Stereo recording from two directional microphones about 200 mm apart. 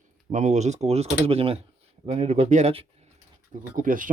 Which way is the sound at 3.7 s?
40° right (ahead or behind).